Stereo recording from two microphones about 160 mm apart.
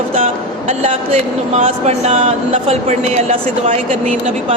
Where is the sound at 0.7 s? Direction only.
45° right (ahead or behind).